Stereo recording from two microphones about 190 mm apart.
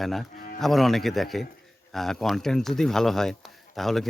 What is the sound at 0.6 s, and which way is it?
Speech, centre (ahead or behind).